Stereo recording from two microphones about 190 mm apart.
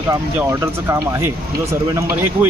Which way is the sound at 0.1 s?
10° right (ahead or behind).